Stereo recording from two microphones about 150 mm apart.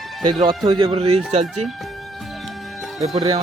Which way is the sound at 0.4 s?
30° right (ahead or behind).